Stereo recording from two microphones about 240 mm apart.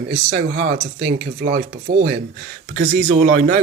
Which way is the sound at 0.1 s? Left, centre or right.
Right.